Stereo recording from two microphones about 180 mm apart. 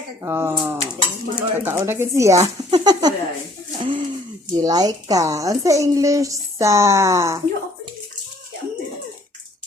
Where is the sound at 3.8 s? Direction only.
30° right (ahead or behind).